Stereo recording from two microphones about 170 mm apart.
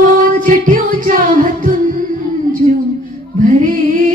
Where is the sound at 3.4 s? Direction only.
50° right (ahead or behind).